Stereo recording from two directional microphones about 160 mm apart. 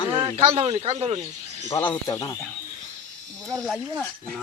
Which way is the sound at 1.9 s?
20° left (ahead or behind).